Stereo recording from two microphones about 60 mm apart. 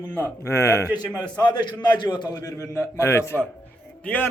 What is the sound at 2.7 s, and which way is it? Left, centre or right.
Speech, left.